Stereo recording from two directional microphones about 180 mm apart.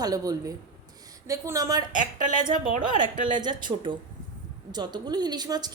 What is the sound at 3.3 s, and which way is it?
A woman's voice, 25° right (ahead or behind).